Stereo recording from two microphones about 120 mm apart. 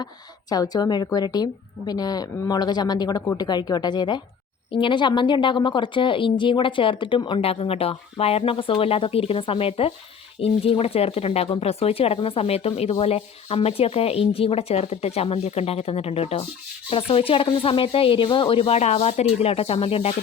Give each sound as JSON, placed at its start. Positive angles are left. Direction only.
{"t": 0.5, "sound": "speech", "side_deg": 35}
{"t": 18.8, "sound": "speech", "side_deg": 65}